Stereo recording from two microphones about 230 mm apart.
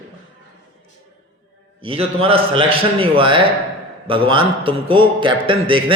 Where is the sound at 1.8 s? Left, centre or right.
Right.